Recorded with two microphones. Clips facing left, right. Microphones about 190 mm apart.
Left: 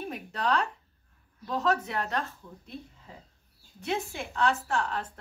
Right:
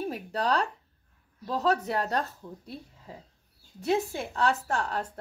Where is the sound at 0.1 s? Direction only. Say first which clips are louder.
Left 2 dB; 35° right (ahead or behind).